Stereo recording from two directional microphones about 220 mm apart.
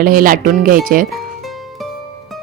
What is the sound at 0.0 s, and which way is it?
Speech, 40° right (ahead or behind).